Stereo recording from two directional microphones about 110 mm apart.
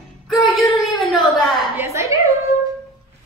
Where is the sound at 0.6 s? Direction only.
Centre (ahead or behind).